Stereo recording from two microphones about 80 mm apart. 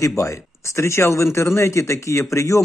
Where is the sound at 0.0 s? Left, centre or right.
Left.